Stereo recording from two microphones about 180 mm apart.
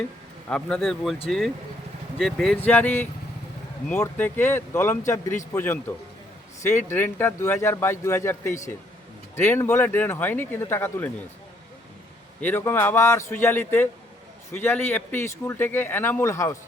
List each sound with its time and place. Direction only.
0.4 s a man's voice: 5° left (ahead or behind)
2.1 s a man's voice: centre (ahead or behind)
12.4 s speech: 10° left (ahead or behind)